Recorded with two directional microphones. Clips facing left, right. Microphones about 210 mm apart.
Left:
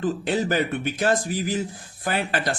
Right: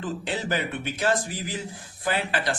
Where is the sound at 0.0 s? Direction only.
45° left (ahead or behind).